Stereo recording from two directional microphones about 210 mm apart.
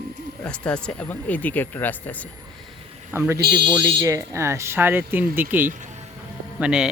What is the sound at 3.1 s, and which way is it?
Speech, 10° right (ahead or behind).